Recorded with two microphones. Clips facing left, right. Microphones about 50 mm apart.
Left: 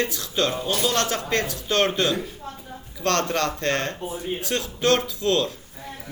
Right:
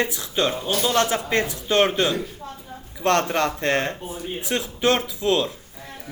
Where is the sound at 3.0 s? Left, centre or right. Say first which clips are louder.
Right 3 dB; centre.